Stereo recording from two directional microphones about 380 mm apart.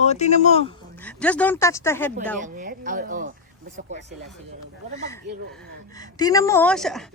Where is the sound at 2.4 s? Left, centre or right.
Right.